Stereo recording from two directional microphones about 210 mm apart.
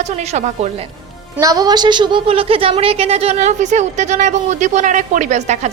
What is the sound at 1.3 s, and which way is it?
A woman's voice, 15° right (ahead or behind).